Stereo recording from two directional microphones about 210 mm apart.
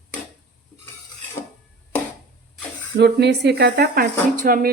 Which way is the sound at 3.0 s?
55° right (ahead or behind).